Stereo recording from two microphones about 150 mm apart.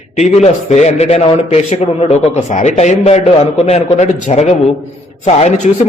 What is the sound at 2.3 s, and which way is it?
Speech, 55° left (ahead or behind).